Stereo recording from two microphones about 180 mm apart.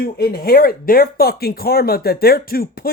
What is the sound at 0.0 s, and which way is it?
Speech, 55° left (ahead or behind).